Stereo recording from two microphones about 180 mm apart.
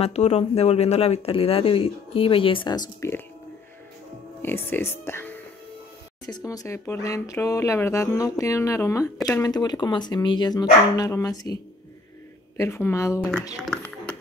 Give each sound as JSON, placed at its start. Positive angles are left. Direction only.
{"t": 0.0, "sound": "speech", "side_deg": 35}
{"t": 4.4, "sound": "speech", "side_deg": 10}
{"t": 12.5, "sound": "speech", "side_deg": 15}